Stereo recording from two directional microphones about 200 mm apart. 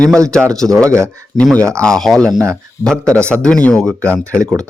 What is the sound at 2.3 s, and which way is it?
Speech, 15° right (ahead or behind).